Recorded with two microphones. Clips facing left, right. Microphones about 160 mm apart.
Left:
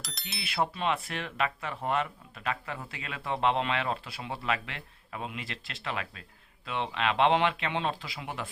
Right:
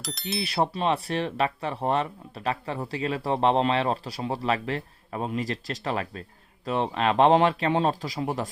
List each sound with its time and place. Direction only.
0.0 s speech: centre (ahead or behind)
0.4 s speech: 35° right (ahead or behind)